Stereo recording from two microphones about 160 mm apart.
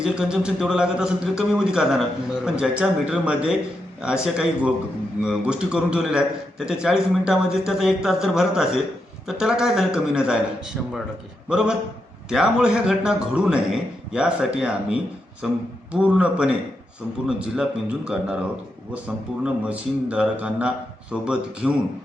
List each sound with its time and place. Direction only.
0.0 s a man's voice: 5° right (ahead or behind)
11.4 s a man's voice: 5° right (ahead or behind)